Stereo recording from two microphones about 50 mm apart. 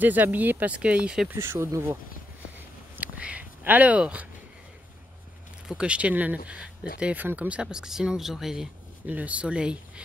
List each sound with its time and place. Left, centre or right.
0.0 s speech: right
0.7 s speech: right
1.4 s speech: right
3.0 s a sound: right
5.8 s speech: right
7.6 s speech: centre
9.0 s speech: right